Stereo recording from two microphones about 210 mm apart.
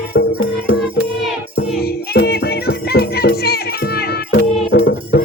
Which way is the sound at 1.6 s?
50° left (ahead or behind).